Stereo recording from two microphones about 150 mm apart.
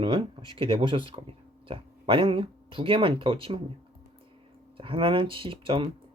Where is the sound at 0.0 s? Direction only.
30° right (ahead or behind).